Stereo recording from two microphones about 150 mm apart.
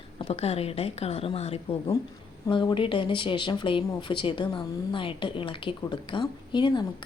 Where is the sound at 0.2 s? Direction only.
40° left (ahead or behind).